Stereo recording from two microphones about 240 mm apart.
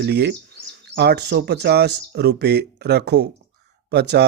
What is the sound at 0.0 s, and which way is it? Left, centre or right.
Speech, right.